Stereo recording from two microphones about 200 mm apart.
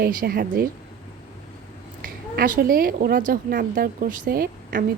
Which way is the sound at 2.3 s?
50° right (ahead or behind).